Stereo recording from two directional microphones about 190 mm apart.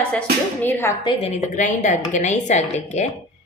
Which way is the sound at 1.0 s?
30° left (ahead or behind).